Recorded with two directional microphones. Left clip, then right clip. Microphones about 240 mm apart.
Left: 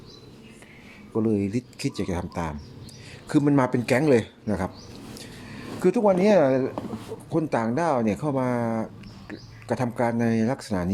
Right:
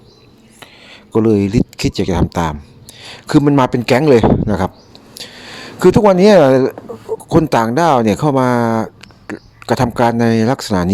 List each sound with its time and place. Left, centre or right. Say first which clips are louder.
1.1 s speech: right 12 dB; right
5.1 s a sound: right 15 dB; right
7.3 s speech: right 12 dB; right